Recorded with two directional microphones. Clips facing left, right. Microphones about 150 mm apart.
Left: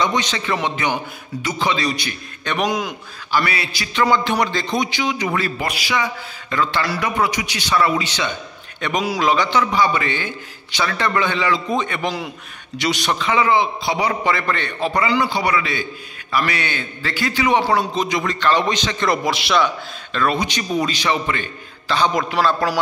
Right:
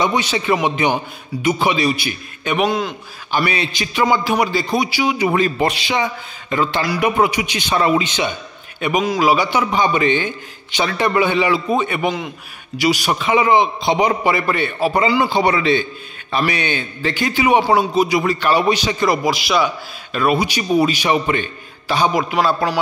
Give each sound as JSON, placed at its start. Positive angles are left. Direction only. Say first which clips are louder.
{"t": 0.0, "sound": "a man's voice", "louder": "right 2 dB", "side_deg": -15}
{"t": 2.7, "sound": "a man's voice", "louder": "right 2 dB", "side_deg": 10}
{"t": 3.3, "sound": "a man's voice", "louder": "right 2 dB", "side_deg": -20}
{"t": 5.3, "sound": "a man's voice", "louder": "right 6 dB", "side_deg": -25}
{"t": 15.0, "sound": "a man's voice", "louder": "right 3 dB", "side_deg": -25}